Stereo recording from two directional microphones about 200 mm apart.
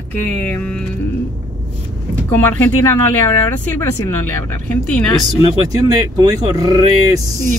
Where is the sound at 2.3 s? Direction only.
10° left (ahead or behind).